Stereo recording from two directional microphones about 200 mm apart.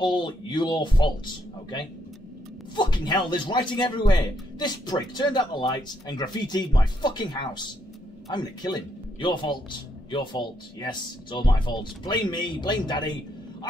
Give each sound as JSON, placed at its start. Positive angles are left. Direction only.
{"t": 0.0, "sound": "speech", "side_deg": 25}